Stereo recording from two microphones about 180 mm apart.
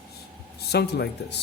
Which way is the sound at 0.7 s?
65° left (ahead or behind).